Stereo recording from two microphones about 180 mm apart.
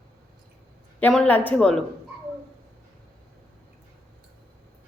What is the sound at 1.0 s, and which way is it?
Speech, 5° left (ahead or behind).